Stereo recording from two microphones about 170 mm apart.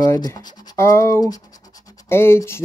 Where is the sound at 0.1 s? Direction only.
20° left (ahead or behind).